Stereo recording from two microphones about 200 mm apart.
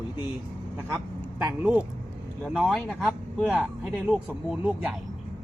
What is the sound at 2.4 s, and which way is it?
Speech, centre (ahead or behind).